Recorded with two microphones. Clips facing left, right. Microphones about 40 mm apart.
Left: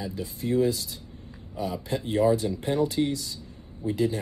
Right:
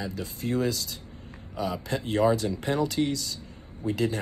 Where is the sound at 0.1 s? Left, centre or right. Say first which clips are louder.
Left 2 dB; right.